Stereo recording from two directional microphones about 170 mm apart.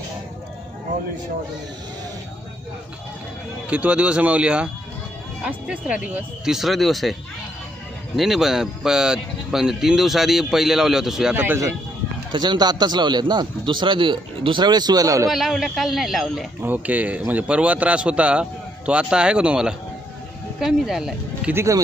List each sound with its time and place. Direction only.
3.7 s a man's voice: 10° right (ahead or behind)
12.3 s speech: 25° right (ahead or behind)
15.3 s a man's voice: centre (ahead or behind)
21.5 s a man's voice: 15° right (ahead or behind)